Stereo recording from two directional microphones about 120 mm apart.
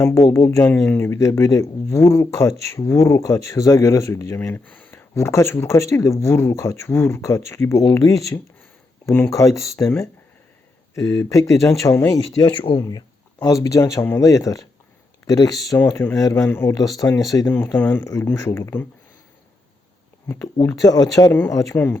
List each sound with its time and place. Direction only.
0.0 s speech: 25° left (ahead or behind)
15.8 s speech: 20° left (ahead or behind)
17.5 s speech: 15° left (ahead or behind)
20.2 s speech: 20° left (ahead or behind)